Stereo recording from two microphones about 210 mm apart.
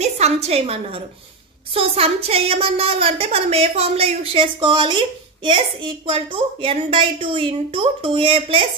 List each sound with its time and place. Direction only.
0.0 s a woman's voice: 30° right (ahead or behind)